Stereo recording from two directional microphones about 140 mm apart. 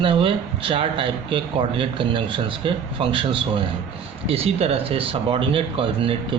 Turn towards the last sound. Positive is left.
turn(degrees=-40)  # may be behind; listen again after turning